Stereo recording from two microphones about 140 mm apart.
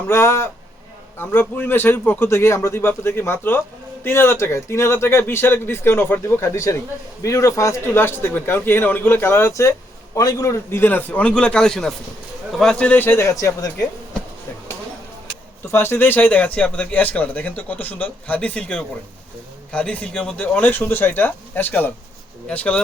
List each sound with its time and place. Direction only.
0.1 s speech: 20° left (ahead or behind)
15.6 s speech: 15° left (ahead or behind)